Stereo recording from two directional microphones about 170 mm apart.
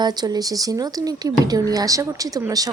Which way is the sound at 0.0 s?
25° right (ahead or behind).